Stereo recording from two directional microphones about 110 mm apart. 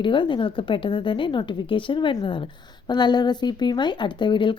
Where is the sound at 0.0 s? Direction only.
45° left (ahead or behind).